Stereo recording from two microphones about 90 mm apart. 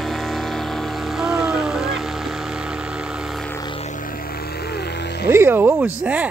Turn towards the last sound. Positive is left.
turn(degrees=-20)  # may be behind; listen again after turning